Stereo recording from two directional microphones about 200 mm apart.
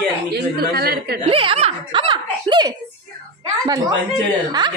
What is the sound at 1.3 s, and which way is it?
Speech, 30° right (ahead or behind).